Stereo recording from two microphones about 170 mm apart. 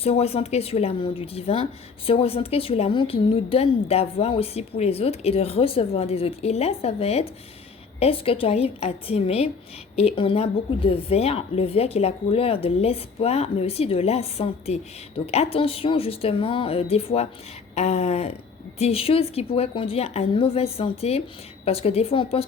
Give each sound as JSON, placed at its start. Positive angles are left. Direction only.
{"t": 0.0, "sound": "a woman's voice", "side_deg": 35}